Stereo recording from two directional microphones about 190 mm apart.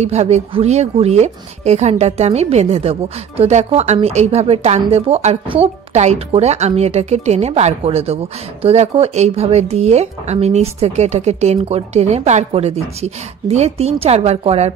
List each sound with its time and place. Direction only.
0.0 s speech: 35° right (ahead or behind)